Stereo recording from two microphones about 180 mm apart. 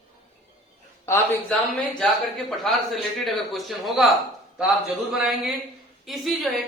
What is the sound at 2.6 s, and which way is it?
A man's voice, centre (ahead or behind).